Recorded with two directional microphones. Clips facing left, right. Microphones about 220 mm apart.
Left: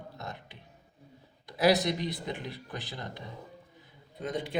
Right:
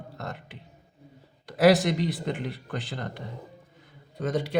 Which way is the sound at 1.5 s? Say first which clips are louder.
Right 6 dB; 75° right (ahead or behind).